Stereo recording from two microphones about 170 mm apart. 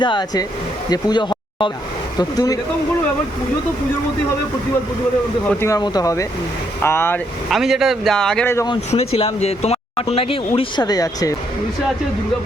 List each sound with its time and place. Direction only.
0.0 s speech: 25° left (ahead or behind)
5.5 s speech: 15° left (ahead or behind)
7.5 s speech: centre (ahead or behind)
8.5 s speech: 25° left (ahead or behind)
8.9 s speech: 35° left (ahead or behind); by 11.3 s 20° left (ahead or behind)